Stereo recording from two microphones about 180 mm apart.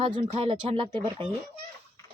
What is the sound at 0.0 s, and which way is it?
Speech, 30° right (ahead or behind).